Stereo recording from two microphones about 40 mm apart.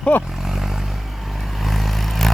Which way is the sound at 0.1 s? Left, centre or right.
Left.